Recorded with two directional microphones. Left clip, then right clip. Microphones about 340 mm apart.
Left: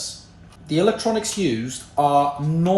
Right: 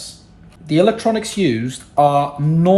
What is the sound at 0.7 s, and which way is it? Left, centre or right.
Speech, centre.